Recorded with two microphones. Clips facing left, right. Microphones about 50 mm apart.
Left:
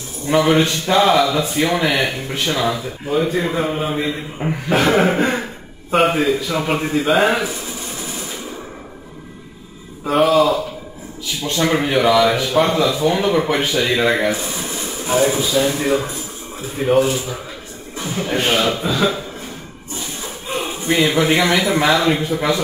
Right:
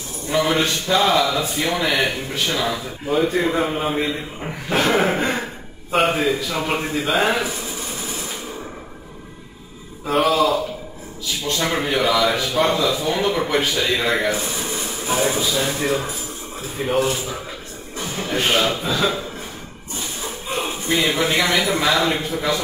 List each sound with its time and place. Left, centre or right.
0.3 s a man's voice: centre
10.0 s a man's voice: centre
11.7 s a man's voice: centre
17.9 s music: centre
18.3 s speech: centre
18.6 s a man's voice: centre
21.0 s a man's voice: centre